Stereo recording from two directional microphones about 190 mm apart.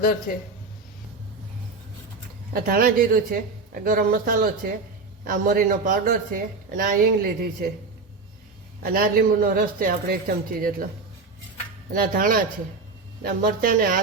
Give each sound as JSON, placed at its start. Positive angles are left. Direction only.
{"t": 0.3, "sound": "speech", "side_deg": 50}
{"t": 2.5, "sound": "speech", "side_deg": -50}
{"t": 8.8, "sound": "speech", "side_deg": -50}
{"t": 11.9, "sound": "speech", "side_deg": -50}